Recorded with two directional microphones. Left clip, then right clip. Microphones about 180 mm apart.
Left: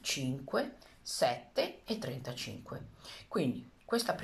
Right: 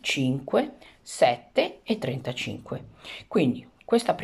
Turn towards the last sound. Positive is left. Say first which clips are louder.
# right 10 dB
turn(degrees=-20)  # may be behind; listen again after turning